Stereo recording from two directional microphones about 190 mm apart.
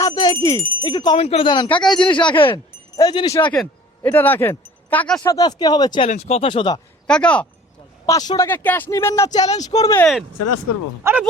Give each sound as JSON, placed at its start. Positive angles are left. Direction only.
{"t": 0.0, "sound": "jingle bell", "side_deg": 20}
{"t": 0.8, "sound": "speech", "side_deg": 25}
{"t": 3.4, "sound": "speech", "side_deg": 5}
{"t": 5.2, "sound": "speech", "side_deg": 20}
{"t": 6.1, "sound": "speech", "side_deg": 35}
{"t": 7.1, "sound": "speech", "side_deg": 5}
{"t": 8.0, "sound": "speech", "side_deg": 15}
{"t": 11.1, "sound": "speech", "side_deg": -15}